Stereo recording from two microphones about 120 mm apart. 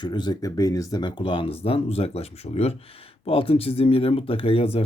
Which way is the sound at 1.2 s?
45° left (ahead or behind).